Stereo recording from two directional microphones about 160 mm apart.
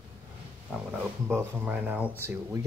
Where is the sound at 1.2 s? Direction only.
15° right (ahead or behind).